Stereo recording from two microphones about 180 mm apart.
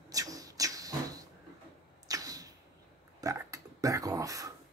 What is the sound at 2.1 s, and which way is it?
Arrow, 20° right (ahead or behind).